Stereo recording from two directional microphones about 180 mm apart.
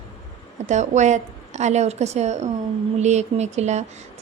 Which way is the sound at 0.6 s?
40° right (ahead or behind).